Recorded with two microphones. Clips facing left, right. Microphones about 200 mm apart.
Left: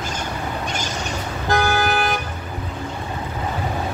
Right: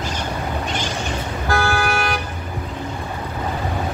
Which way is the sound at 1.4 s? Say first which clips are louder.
Left 1 dB; 20° left (ahead or behind).